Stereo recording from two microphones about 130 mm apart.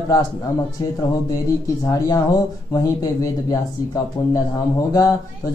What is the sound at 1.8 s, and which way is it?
Speech, 30° left (ahead or behind).